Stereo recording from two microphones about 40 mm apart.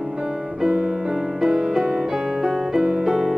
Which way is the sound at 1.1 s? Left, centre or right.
Centre.